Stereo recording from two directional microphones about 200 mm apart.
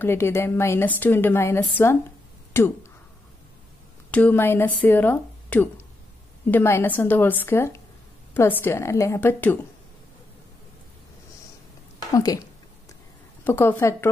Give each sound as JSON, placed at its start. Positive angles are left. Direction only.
{"t": 0.0, "sound": "a woman's voice", "side_deg": 10}
{"t": 4.1, "sound": "a woman's voice", "side_deg": 10}
{"t": 12.1, "sound": "speech", "side_deg": 20}
{"t": 13.4, "sound": "speech", "side_deg": 10}